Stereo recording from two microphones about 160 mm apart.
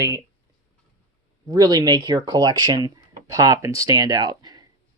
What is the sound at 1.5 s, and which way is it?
Speech, 25° right (ahead or behind).